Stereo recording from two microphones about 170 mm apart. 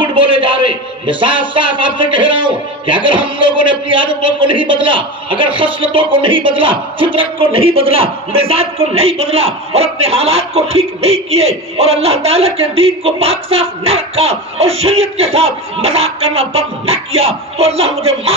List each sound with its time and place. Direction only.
0.0 s a man's voice: 30° right (ahead or behind)